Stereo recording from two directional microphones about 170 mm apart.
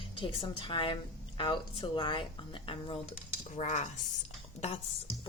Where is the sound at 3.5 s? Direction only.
45° left (ahead or behind).